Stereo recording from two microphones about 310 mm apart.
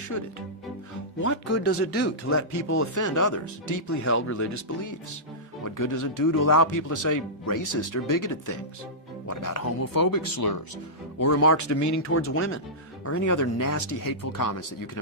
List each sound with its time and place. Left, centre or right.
1.5 s speech: left
2.9 s speech: left
11.3 s speech: left
12.0 s speech: left
13.1 s speech: left